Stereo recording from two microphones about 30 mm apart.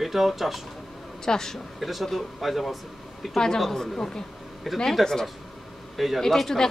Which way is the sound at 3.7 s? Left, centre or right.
Centre.